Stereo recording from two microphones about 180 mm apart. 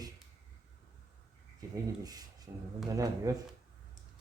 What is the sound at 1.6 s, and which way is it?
Speech, 20° right (ahead or behind).